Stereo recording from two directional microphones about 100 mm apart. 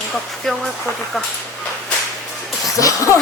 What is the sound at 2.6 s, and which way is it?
Speech, 35° left (ahead or behind).